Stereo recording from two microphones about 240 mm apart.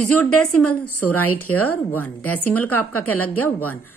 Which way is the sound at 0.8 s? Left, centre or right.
Left.